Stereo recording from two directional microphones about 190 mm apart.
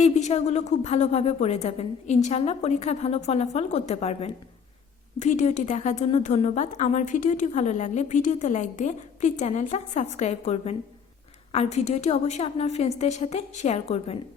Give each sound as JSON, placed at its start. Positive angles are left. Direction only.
{"t": 0.0, "sound": "a woman's voice", "side_deg": 35}